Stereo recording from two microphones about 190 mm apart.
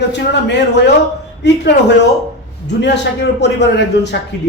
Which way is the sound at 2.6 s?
65° left (ahead or behind).